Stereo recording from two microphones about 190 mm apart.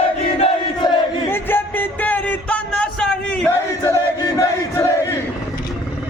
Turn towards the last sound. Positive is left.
turn(degrees=15)  # may be behind; listen again after turning